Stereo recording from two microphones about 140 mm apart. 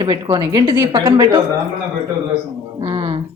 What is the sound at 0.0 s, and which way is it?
A woman's voice, 30° right (ahead or behind).